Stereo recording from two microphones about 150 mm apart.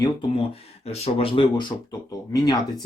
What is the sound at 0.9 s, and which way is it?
Speech, 40° left (ahead or behind).